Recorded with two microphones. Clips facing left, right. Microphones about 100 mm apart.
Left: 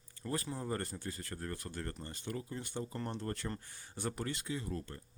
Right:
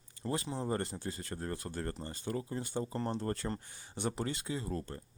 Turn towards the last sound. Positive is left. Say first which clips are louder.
# right 2 dB
turn(degrees=-35)  # may be behind; listen again after turning